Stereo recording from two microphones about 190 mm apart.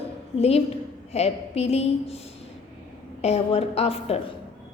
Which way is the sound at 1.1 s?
35° left (ahead or behind).